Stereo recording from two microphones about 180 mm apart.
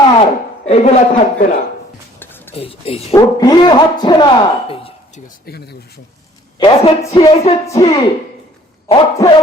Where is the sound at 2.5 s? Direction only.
30° left (ahead or behind).